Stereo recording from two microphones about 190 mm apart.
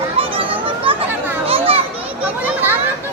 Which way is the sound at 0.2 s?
30° right (ahead or behind).